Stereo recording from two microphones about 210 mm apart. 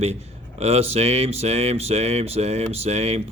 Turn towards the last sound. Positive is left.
turn(degrees=-30)  # may be behind; listen again after turning